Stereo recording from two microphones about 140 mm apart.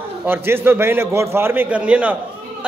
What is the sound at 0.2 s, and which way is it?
A man's voice, 15° right (ahead or behind).